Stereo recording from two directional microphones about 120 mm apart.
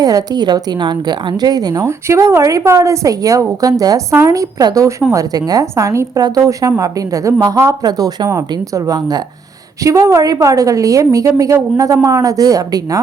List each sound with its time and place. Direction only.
0.0 s a woman's voice: 30° right (ahead or behind)